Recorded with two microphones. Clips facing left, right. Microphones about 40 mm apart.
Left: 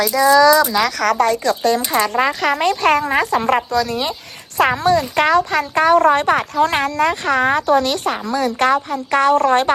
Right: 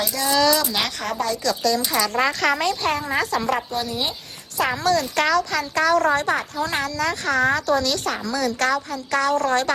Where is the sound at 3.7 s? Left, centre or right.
Left.